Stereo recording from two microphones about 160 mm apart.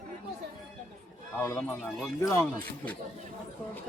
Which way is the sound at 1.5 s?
5° left (ahead or behind).